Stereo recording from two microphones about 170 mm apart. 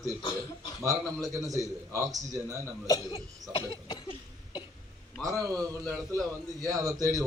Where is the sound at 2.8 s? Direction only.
20° left (ahead or behind).